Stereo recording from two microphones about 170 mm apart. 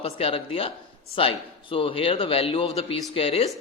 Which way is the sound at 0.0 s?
35° left (ahead or behind).